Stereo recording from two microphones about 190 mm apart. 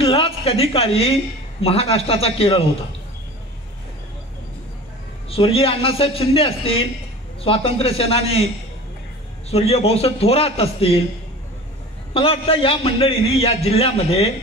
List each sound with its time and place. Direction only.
0.0 s a woman's voice: 30° left (ahead or behind)
5.3 s a man's voice: 30° left (ahead or behind)
9.5 s a woman's voice: 30° left (ahead or behind)
12.1 s a man's voice: 30° left (ahead or behind)